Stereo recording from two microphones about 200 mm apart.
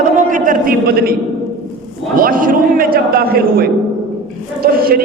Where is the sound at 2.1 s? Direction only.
45° right (ahead or behind).